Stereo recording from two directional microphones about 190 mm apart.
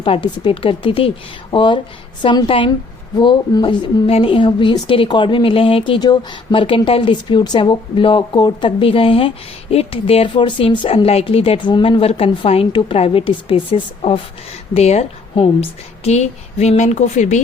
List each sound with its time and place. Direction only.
0.0 s a woman's voice: 25° left (ahead or behind)